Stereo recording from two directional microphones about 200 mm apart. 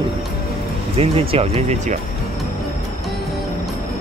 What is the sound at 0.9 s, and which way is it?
Speech, 30° right (ahead or behind).